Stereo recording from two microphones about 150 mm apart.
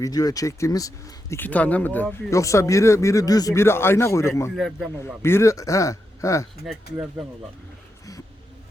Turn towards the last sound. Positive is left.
turn(degrees=0)  # may be behind; listen again after turning